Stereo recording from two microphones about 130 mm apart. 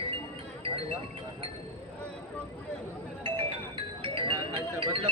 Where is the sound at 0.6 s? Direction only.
45° right (ahead or behind).